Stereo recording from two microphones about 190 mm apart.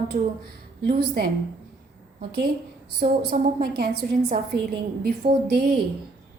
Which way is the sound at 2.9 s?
50° right (ahead or behind).